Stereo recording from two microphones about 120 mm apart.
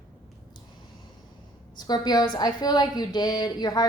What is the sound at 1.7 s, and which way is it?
A woman's voice, 35° left (ahead or behind).